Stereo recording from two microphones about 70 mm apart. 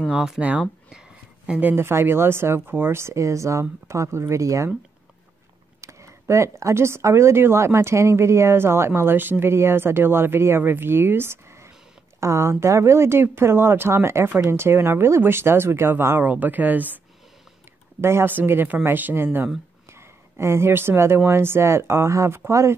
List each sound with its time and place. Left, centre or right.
0.1 s speech: centre
1.8 s speech: right
5.8 s speech: right
18.0 s speech: right